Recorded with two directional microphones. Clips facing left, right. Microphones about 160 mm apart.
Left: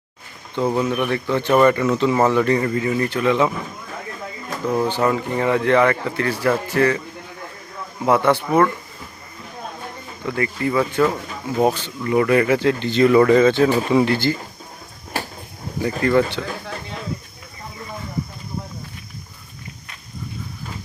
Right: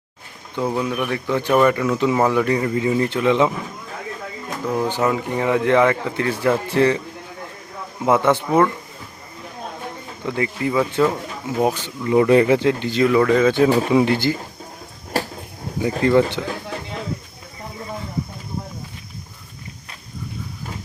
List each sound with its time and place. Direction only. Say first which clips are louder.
0.5 s speech: left 2 dB; centre (ahead or behind); by 3.5 s 20° right (ahead or behind)
4.6 s speech: left 2 dB; centre (ahead or behind)
4.9 s speech: left 1 dB; 10° right (ahead or behind)
8.0 s speech: even; 20° right (ahead or behind)
10.2 s speech: even; 15° right (ahead or behind)
11.7 s speech: right 2 dB; 15° right (ahead or behind); by 13.5 s centre (ahead or behind)
13.5 s speech: right 1 dB; 15° right (ahead or behind)
15.8 s speech: right 1 dB; 20° right (ahead or behind)